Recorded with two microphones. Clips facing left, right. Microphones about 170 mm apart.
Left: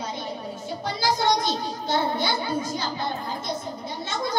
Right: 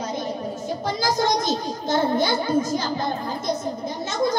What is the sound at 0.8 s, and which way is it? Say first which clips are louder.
A child's voice: right 1 dB; 45° right (ahead or behind).